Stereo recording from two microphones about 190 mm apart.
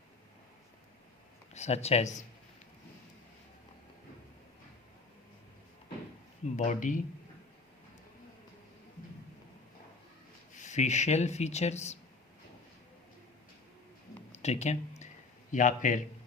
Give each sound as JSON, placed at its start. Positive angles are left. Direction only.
{"t": 1.5, "sound": "speech", "side_deg": 35}
{"t": 6.4, "sound": "speech", "side_deg": 40}
{"t": 10.5, "sound": "speech", "side_deg": 40}
{"t": 14.3, "sound": "speech", "side_deg": 35}